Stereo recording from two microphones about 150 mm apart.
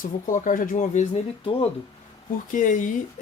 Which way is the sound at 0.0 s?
60° left (ahead or behind).